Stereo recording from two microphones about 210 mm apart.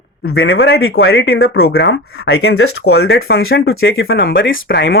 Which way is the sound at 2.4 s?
90° left.